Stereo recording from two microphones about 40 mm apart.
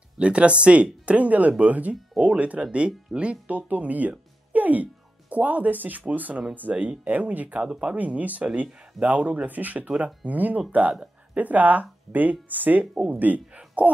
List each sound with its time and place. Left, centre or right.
0.2 s speech: right
4.1 s music: right
5.3 s speech: right
13.6 s a sound: right